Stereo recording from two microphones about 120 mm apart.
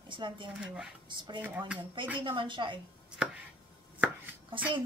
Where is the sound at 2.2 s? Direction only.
45° right (ahead or behind).